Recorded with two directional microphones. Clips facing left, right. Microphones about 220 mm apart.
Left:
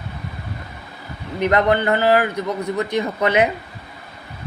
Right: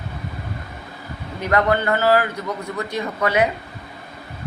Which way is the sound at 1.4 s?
20° left (ahead or behind).